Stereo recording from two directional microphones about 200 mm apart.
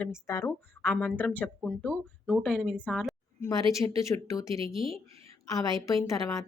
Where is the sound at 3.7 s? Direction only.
15° left (ahead or behind).